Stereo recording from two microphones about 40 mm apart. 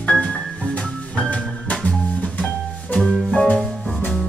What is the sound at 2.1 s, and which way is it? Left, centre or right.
Music, left.